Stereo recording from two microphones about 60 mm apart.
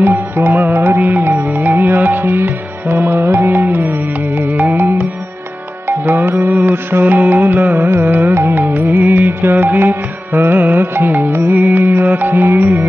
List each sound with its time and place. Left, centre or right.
0.0 s music: right
8.3 s music: right
8.5 s music: right
11.2 s music: right
11.5 s music: right